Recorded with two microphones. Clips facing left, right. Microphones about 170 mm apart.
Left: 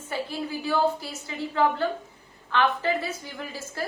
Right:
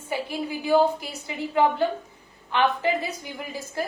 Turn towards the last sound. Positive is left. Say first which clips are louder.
# right 3 dB
turn(degrees=-15)  # may be behind; listen again after turning